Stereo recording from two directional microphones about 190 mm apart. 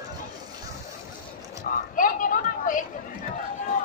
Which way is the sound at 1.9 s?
45° left (ahead or behind).